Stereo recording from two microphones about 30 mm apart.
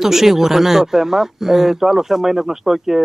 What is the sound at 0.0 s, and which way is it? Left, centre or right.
Speech, centre.